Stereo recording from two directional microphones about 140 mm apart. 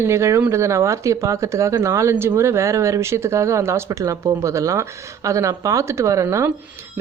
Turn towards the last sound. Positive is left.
turn(degrees=-20)  # may be behind; listen again after turning